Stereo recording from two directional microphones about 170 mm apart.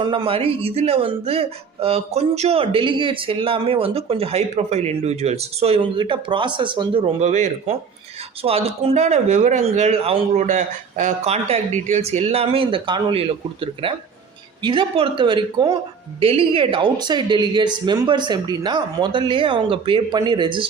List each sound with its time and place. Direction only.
0.0 s a man's voice: 30° right (ahead or behind)
10.4 s a man's voice: 50° right (ahead or behind); by 20.7 s 25° right (ahead or behind)